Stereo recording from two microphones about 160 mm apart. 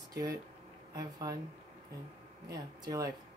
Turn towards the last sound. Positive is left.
turn(degrees=-20)  # may be behind; listen again after turning